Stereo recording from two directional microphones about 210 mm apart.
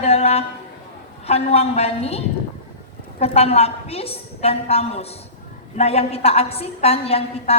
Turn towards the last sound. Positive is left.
turn(degrees=30)  # may be behind; listen again after turning